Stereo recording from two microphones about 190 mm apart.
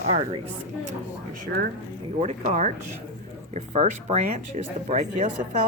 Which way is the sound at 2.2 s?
40° right (ahead or behind).